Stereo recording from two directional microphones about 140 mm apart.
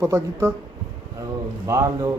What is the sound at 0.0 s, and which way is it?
Speech, 20° right (ahead or behind).